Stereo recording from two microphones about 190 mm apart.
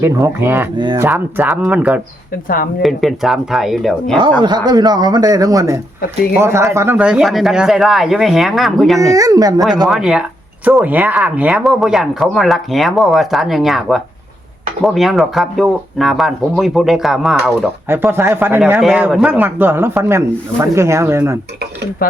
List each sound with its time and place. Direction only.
0.0 s speech: 15° right (ahead or behind)
0.8 s speech: 25° right (ahead or behind)
1.0 s speech: 10° right (ahead or behind)
4.4 s speech: 20° right (ahead or behind); by 9.0 s centre (ahead or behind)
9.1 s speech: 20° right (ahead or behind)
9.9 s speech: 5° right (ahead or behind)
17.8 s speech: 10° right (ahead or behind)